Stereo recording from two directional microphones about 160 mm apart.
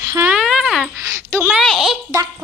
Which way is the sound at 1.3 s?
15° right (ahead or behind).